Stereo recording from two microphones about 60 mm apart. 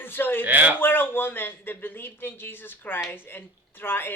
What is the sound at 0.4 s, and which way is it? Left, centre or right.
Speech, right.